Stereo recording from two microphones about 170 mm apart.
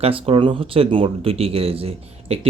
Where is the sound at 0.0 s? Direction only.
30° right (ahead or behind).